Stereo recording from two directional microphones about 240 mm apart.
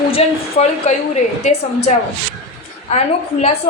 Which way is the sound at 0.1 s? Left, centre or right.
Left.